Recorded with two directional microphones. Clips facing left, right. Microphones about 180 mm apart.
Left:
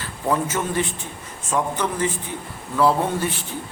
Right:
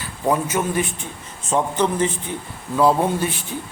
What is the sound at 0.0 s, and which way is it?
Speech, 15° right (ahead or behind).